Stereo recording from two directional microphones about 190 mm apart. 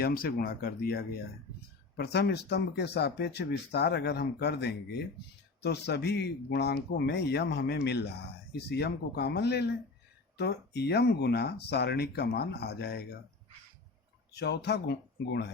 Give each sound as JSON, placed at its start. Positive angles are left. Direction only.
{"t": 0.0, "sound": "speech", "side_deg": 50}
{"t": 14.3, "sound": "speech", "side_deg": 60}